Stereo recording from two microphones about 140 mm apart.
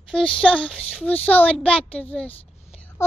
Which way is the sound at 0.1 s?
5° left (ahead or behind).